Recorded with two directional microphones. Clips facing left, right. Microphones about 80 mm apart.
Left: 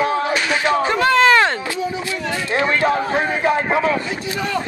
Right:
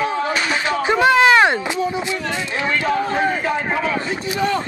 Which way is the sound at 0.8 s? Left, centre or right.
Centre.